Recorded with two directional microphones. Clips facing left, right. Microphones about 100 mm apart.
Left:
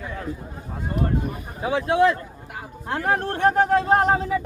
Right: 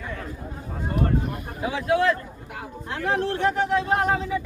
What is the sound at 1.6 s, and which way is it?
Speech, 30° left (ahead or behind).